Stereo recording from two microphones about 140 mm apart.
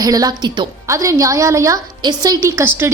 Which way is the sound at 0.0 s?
25° right (ahead or behind).